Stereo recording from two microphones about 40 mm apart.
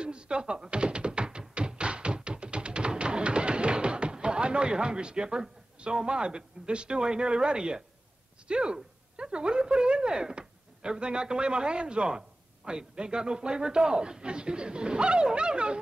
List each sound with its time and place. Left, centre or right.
0.0 s thunk: right
8.5 s a woman's voice: right